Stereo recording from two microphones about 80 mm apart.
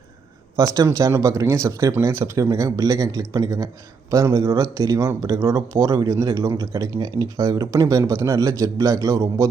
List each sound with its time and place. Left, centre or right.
0.5 s speech: right
1.1 s speech: right
1.9 s speech: right